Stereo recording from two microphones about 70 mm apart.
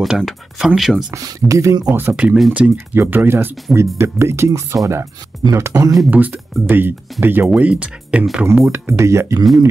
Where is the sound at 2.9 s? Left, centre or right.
Right.